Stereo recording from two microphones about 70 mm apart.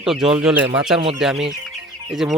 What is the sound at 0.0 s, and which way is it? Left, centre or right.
Speech, centre.